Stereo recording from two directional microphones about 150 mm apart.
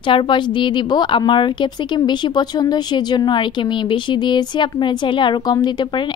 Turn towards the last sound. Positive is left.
turn(degrees=30)  # may be behind; listen again after turning